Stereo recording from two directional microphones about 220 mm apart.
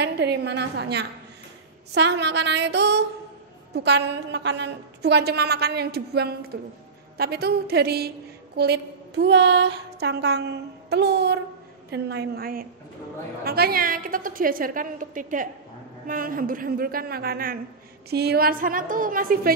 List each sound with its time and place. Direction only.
0.0 s a woman's voice: 50° right (ahead or behind)